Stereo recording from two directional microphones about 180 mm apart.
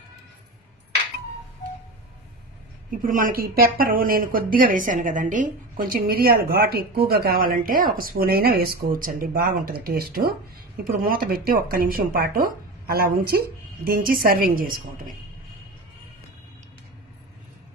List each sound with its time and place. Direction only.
3.1 s speech: 50° right (ahead or behind)